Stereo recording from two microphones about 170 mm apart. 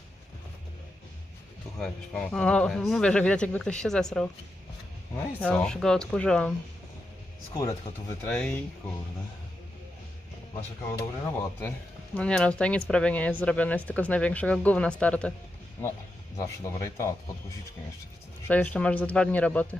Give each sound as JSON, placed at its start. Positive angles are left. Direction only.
{"t": 1.8, "sound": "speech", "side_deg": 5}
{"t": 7.5, "sound": "speech", "side_deg": 20}
{"t": 8.2, "sound": "speech", "side_deg": 5}
{"t": 10.9, "sound": "speech", "side_deg": 15}
{"t": 12.1, "sound": "speech", "side_deg": 5}
{"t": 18.4, "sound": "speech", "side_deg": 10}